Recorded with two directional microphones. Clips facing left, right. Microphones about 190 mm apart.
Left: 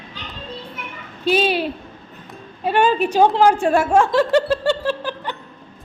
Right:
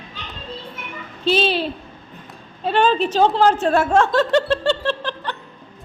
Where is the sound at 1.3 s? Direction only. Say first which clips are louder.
Left 1 dB; 10° left (ahead or behind).